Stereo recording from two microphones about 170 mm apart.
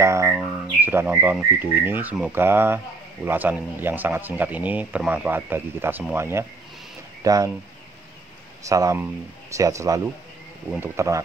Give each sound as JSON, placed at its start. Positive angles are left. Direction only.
{"t": 0.0, "sound": "bird", "side_deg": -15}
{"t": 0.7, "sound": "speech", "side_deg": -10}
{"t": 8.6, "sound": "speech", "side_deg": -20}